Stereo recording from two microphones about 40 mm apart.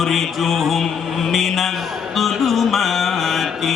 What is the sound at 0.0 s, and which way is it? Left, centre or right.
Speech, centre.